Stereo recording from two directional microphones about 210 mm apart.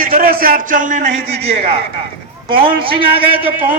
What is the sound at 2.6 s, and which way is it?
Speech, 25° right (ahead or behind).